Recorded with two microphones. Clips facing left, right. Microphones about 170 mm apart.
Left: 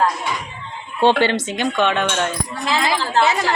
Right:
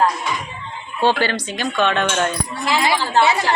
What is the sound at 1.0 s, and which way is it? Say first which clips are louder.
A woman's voice: left 3 dB; 25° left (ahead or behind).